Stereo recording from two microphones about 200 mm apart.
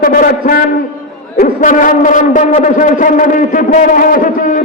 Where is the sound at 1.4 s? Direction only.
40° left (ahead or behind).